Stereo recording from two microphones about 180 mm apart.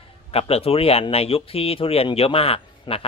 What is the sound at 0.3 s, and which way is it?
A man's voice, 35° left (ahead or behind).